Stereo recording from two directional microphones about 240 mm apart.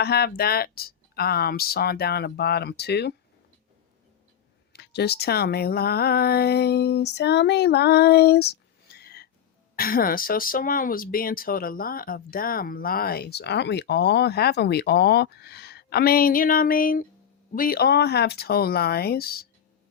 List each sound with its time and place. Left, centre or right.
0.0 s speech: left
4.7 s speech: left